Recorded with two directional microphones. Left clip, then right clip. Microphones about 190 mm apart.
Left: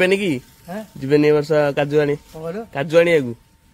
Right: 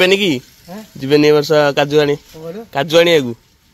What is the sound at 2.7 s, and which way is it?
Speech, 35° right (ahead or behind).